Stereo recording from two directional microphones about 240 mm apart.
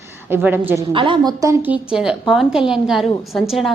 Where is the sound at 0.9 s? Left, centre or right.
Right; by 3.7 s centre.